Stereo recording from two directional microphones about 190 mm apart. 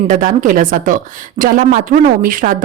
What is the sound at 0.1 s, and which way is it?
Speech, 45° right (ahead or behind).